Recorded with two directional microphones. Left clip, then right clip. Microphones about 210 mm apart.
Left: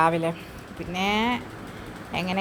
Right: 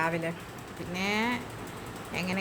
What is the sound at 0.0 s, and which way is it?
A woman's voice, 25° left (ahead or behind).